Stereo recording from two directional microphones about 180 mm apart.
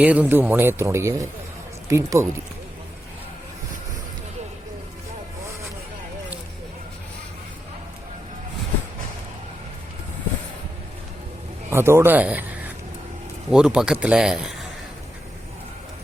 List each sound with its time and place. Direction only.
0.0 s speech: 10° right (ahead or behind)
11.7 s a man's voice: 15° right (ahead or behind)